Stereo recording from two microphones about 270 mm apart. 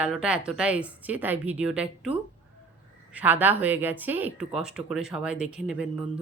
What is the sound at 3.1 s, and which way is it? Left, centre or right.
Speech, centre.